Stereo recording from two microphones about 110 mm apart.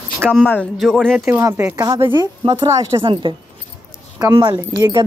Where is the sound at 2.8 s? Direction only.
50° right (ahead or behind).